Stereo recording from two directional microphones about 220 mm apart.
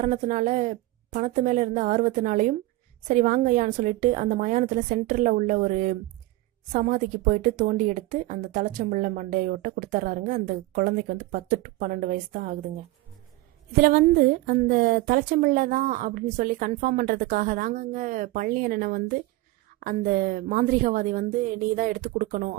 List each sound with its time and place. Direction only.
0.0 s a woman's voice: 35° right (ahead or behind)